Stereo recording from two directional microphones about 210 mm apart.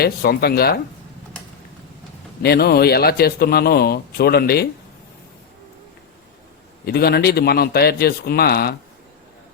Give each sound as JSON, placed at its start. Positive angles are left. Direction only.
{"t": 0.0, "sound": "speech", "side_deg": 50}
{"t": 2.4, "sound": "speech", "side_deg": 50}
{"t": 6.8, "sound": "speech", "side_deg": 50}